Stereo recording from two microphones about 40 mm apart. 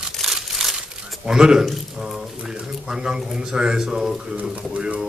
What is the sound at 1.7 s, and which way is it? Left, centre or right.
Speech, centre.